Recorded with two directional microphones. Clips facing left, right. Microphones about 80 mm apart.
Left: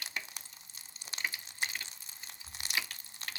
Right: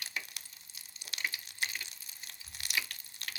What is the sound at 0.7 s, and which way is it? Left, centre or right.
Water, left.